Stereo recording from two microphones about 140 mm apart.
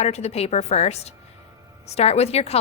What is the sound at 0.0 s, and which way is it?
A woman's voice, 50° left (ahead or behind).